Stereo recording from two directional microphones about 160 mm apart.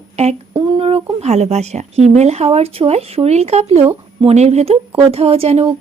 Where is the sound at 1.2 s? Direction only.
45° right (ahead or behind).